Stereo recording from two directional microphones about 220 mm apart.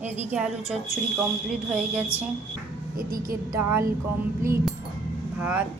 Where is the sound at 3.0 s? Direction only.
40° right (ahead or behind).